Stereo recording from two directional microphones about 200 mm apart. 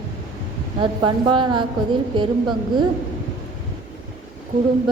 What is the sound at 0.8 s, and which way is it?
Speech, 25° right (ahead or behind).